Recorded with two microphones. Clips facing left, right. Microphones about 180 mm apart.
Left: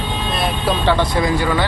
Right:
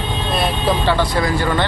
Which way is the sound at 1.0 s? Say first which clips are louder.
Left 1 dB; 20° left (ahead or behind).